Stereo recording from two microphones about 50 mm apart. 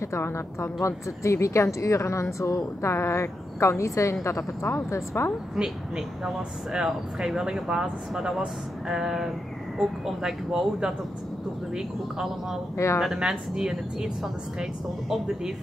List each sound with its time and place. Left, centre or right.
0.2 s a woman's voice: left
5.6 s speech: centre
12.7 s a woman's voice: left
13.0 s speech: centre